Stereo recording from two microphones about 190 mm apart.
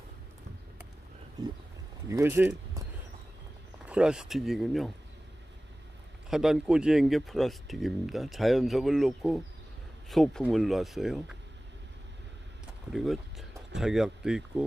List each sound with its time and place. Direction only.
2.0 s speech: 15° right (ahead or behind)
3.8 s speech: 5° right (ahead or behind)
6.3 s speech: 5° right (ahead or behind)
12.9 s speech: centre (ahead or behind)